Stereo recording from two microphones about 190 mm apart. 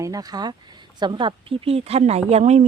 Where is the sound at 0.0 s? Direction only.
20° right (ahead or behind).